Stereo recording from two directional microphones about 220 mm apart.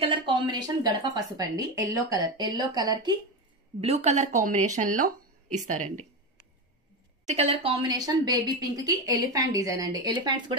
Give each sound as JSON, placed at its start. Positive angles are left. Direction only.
{"t": 0.0, "sound": "speech", "side_deg": -20}
{"t": 3.8, "sound": "speech", "side_deg": -30}
{"t": 7.2, "sound": "speech", "side_deg": -30}